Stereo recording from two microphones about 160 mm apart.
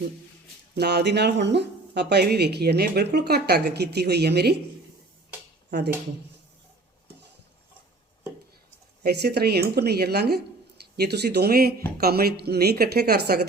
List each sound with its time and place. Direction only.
0.8 s speech: 90° right
9.0 s a woman's voice: 90° right